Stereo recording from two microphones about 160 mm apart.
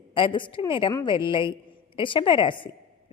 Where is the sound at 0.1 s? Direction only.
30° left (ahead or behind).